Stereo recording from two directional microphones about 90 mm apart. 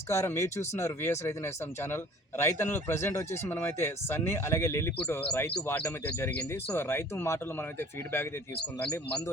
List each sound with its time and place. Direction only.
0.1 s speech: 35° left (ahead or behind)
6.2 s speech: 30° left (ahead or behind)